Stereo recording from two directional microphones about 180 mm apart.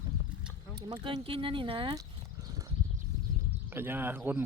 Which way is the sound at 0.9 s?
25° right (ahead or behind).